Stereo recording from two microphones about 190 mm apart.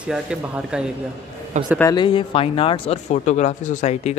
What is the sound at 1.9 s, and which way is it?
Speech, 25° left (ahead or behind).